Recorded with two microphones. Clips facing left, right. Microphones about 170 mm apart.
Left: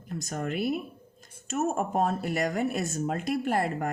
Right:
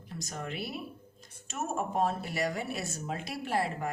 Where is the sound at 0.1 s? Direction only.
50° left (ahead or behind).